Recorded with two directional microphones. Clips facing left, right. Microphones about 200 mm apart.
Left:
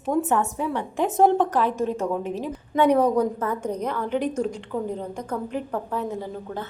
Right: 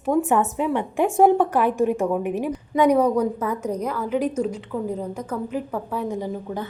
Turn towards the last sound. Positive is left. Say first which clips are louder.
# right 3 dB
turn(degrees=-15)  # may be behind; listen again after turning